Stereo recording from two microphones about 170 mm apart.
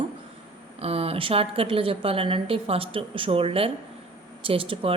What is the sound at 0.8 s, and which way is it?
A woman's voice, 35° right (ahead or behind).